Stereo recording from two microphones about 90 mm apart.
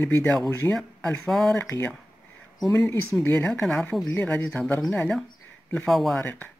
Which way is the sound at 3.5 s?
5° left (ahead or behind).